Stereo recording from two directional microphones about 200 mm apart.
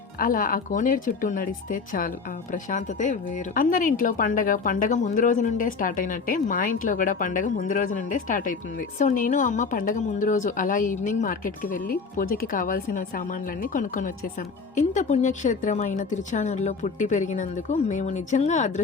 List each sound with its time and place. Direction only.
0.2 s speech: 45° left (ahead or behind)